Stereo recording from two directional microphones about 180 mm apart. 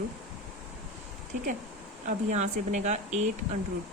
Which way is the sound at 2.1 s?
40° right (ahead or behind).